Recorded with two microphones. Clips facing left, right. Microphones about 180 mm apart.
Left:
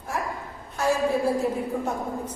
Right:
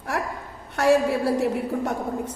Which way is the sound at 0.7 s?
75° right (ahead or behind).